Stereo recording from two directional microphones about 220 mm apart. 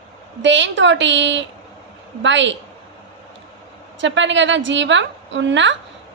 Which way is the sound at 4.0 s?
55° right (ahead or behind).